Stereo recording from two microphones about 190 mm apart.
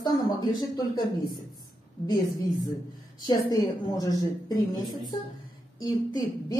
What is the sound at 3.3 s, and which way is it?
Speech, 20° left (ahead or behind).